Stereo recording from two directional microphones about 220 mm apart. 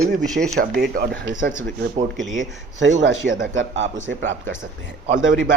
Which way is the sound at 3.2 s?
45° right (ahead or behind).